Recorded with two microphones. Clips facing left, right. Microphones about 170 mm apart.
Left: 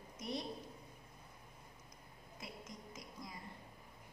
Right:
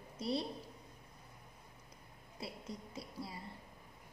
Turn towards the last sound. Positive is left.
turn(degrees=-30)  # may be behind; listen again after turning